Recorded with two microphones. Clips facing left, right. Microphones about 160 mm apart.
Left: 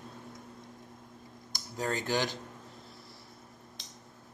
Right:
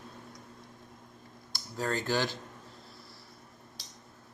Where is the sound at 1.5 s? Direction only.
20° left (ahead or behind).